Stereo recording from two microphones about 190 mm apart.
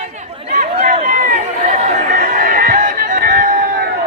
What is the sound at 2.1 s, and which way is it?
Music, 50° right (ahead or behind).